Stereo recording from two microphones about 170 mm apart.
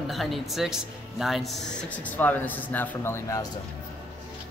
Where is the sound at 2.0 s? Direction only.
10° left (ahead or behind).